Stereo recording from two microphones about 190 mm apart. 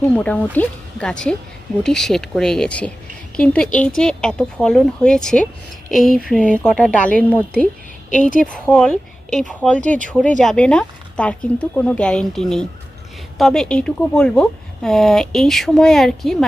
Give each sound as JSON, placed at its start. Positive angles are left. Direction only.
{"t": 0.0, "sound": "speech", "side_deg": 10}
{"t": 8.1, "sound": "speech", "side_deg": 45}
{"t": 8.4, "sound": "speech", "side_deg": 5}